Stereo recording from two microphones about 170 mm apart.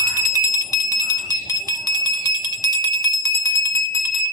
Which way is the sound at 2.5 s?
20° left (ahead or behind).